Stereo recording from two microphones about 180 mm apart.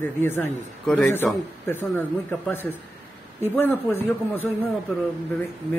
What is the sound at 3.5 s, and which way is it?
Speech, 10° left (ahead or behind).